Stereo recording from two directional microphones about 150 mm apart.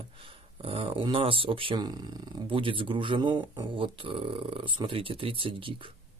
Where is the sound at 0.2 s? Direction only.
35° right (ahead or behind).